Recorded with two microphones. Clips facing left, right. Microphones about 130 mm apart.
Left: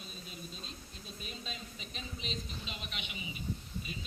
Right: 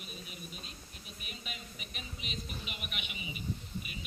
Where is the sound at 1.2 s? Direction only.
15° right (ahead or behind).